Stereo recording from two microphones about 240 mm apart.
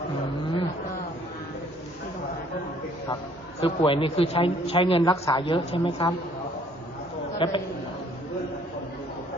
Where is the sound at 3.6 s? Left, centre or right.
Left.